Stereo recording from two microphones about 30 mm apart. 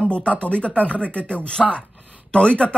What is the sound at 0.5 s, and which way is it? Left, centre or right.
Speech, left.